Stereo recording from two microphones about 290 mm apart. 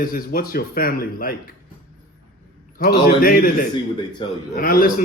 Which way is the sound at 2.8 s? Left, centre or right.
Left.